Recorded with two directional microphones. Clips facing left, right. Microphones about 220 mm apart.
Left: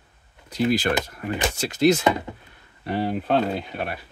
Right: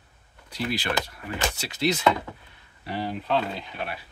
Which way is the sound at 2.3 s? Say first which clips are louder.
Left 3 dB; 20° left (ahead or behind).